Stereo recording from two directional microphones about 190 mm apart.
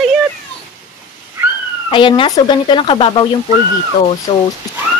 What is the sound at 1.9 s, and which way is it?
Speech, 25° left (ahead or behind).